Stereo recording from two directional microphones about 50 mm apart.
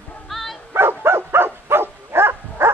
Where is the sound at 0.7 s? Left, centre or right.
Right.